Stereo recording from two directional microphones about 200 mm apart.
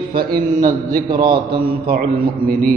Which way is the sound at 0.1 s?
50° right (ahead or behind).